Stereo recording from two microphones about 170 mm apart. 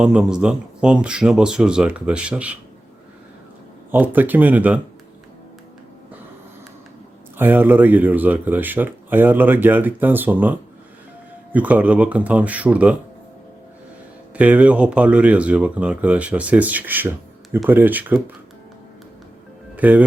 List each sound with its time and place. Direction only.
0.0 s speech: 5° right (ahead or behind)
3.9 s speech: 10° right (ahead or behind)
7.3 s speech: 10° right (ahead or behind)
14.3 s speech: 10° right (ahead or behind)
19.7 s speech: 10° right (ahead or behind)